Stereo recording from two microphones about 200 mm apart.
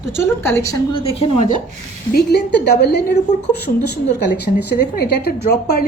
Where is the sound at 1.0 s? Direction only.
30° left (ahead or behind).